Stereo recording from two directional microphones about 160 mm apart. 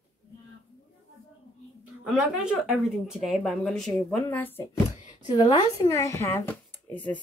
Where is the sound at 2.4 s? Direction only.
Centre (ahead or behind).